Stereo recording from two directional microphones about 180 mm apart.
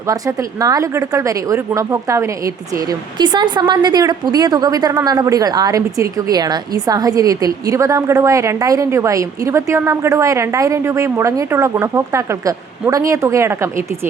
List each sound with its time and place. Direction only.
0.1 s speech: 20° right (ahead or behind)